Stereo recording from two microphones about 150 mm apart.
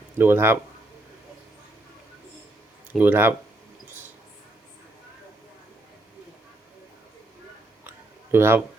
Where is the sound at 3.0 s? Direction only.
15° right (ahead or behind).